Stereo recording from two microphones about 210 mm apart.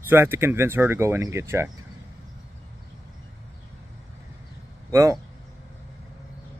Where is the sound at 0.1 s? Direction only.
10° right (ahead or behind).